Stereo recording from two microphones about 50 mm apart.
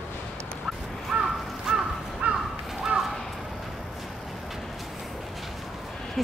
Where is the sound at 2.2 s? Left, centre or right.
Right.